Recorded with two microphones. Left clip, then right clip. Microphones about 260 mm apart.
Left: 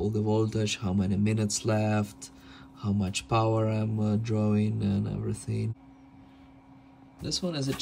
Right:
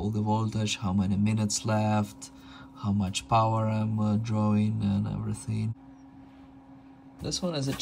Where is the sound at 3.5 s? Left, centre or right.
Left.